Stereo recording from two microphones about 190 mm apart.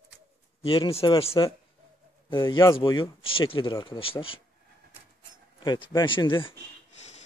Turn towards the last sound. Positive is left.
turn(degrees=25)  # may be behind; listen again after turning